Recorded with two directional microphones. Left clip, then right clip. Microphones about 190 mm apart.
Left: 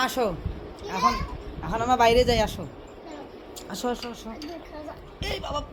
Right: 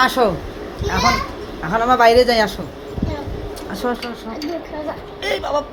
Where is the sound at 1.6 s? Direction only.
40° left (ahead or behind).